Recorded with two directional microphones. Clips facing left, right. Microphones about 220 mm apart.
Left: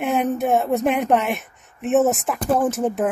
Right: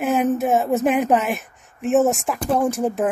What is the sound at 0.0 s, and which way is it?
Speech, centre (ahead or behind).